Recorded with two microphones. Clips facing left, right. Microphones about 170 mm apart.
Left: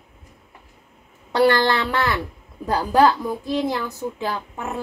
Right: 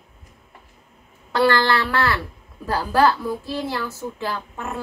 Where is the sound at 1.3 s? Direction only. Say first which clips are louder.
Left 1 dB; 20° left (ahead or behind).